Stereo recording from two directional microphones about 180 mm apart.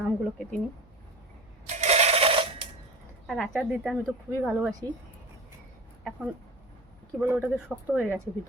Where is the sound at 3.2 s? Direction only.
5° left (ahead or behind).